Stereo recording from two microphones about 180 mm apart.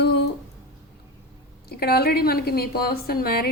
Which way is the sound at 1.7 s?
60° left (ahead or behind).